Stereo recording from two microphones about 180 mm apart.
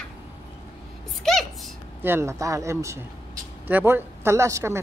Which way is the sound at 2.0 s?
15° right (ahead or behind).